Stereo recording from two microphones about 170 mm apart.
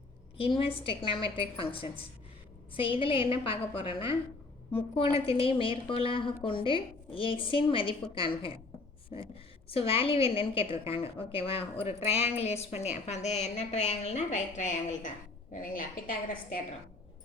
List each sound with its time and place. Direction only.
0.3 s a woman's voice: 30° left (ahead or behind)